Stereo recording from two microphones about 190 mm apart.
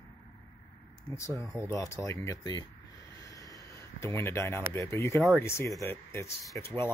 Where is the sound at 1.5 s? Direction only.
15° left (ahead or behind).